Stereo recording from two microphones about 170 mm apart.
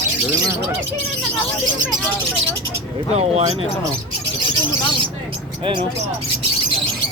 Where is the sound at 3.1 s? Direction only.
40° right (ahead or behind).